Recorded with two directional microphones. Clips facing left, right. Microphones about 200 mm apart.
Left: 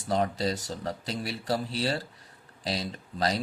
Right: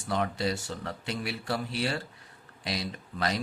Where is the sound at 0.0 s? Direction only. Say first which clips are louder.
Left 2 dB; 35° left (ahead or behind).